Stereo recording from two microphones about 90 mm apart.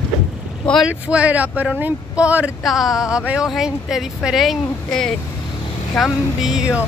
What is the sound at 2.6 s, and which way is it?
A woman's voice, 5° right (ahead or behind).